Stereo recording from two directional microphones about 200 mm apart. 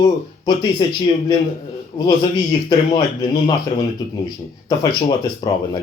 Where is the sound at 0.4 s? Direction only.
20° left (ahead or behind).